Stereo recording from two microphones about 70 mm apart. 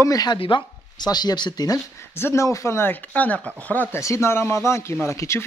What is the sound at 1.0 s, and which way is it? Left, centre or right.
Speech, left.